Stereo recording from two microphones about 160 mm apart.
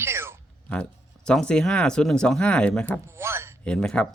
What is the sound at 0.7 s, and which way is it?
Speech, 5° left (ahead or behind).